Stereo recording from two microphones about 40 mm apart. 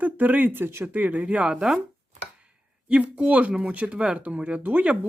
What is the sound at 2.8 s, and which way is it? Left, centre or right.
Speech, right.